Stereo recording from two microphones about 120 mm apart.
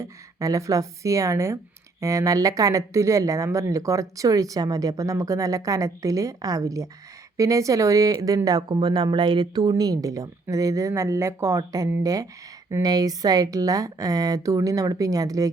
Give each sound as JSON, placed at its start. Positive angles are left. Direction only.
{"t": 0.0, "sound": "speech", "side_deg": -25}